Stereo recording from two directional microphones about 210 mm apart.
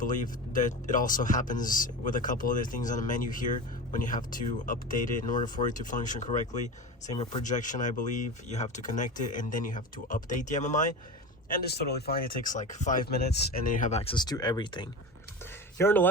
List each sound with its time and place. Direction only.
0.0 s speech: 40° left (ahead or behind)
11.5 s speech: 50° left (ahead or behind)
13.7 s speech: 35° left (ahead or behind)
15.8 s a man's voice: 10° left (ahead or behind)